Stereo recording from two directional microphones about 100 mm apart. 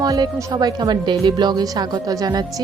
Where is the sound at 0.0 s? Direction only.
40° right (ahead or behind).